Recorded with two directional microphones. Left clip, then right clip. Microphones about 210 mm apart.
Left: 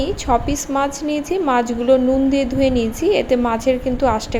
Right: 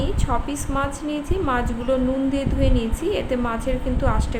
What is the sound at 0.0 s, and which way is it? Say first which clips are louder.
A woman's voice: left 7 dB; 30° left (ahead or behind).